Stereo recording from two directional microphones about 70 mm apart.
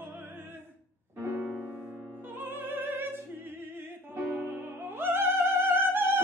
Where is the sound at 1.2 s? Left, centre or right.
Right.